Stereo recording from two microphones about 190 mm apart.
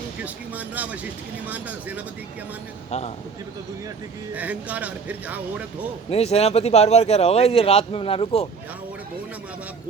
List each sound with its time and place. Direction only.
0.2 s a man's voice: 10° right (ahead or behind)
4.4 s a man's voice: 10° right (ahead or behind)
6.1 s speech: 35° left (ahead or behind)